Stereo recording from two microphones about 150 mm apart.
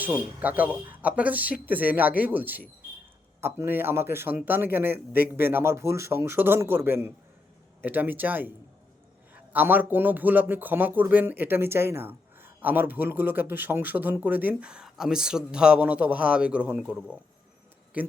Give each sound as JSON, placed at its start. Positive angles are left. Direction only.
{"t": 0.0, "sound": "a man's voice", "side_deg": -10}